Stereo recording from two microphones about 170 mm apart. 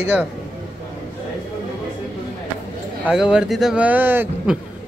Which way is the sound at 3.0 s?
5° right (ahead or behind).